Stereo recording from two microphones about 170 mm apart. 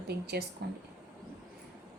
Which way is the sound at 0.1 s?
70° right (ahead or behind).